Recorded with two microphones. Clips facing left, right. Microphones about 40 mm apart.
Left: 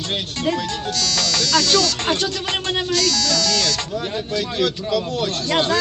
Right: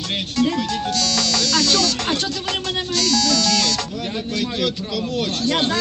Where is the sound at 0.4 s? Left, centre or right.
Left.